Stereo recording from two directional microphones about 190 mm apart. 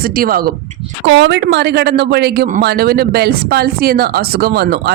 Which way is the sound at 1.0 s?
75° right (ahead or behind).